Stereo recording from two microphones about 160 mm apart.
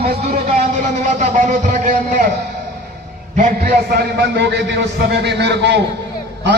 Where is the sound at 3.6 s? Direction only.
80° right.